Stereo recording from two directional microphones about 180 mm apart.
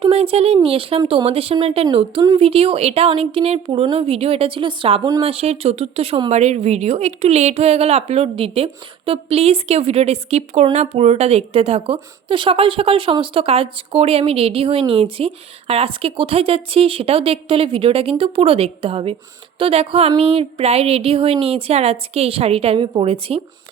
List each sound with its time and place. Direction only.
0.0 s a woman's voice: 35° right (ahead or behind)